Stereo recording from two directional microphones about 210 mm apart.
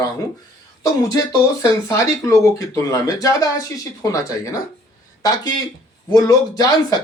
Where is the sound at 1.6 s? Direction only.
15° left (ahead or behind).